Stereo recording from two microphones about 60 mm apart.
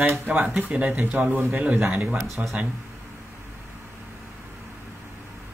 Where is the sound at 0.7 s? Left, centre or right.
Centre.